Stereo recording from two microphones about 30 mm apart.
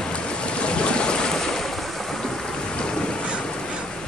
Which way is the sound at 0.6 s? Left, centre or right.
Left.